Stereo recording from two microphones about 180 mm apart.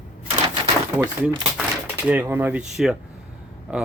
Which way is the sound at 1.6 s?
10° right (ahead or behind).